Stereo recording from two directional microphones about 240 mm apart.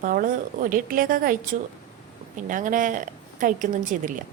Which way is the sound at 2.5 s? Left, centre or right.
Right.